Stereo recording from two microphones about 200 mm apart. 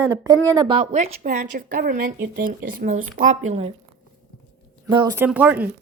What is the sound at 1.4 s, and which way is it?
Speech, 50° right (ahead or behind).